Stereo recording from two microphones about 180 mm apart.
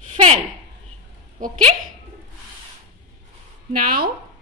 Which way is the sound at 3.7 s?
55° right (ahead or behind).